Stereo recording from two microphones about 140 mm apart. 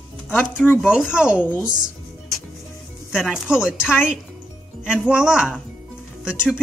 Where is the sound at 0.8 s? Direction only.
5° right (ahead or behind).